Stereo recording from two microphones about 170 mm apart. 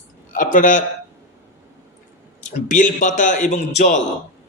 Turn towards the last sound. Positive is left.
turn(degrees=45)  # may be behind; listen again after turning